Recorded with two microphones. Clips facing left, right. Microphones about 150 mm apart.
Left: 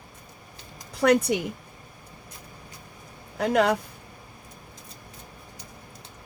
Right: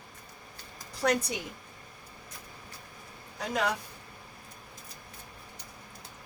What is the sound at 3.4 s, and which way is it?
Speech, 65° left (ahead or behind).